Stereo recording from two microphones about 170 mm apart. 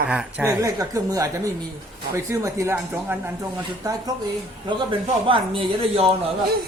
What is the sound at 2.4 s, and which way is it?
Speech, 15° right (ahead or behind).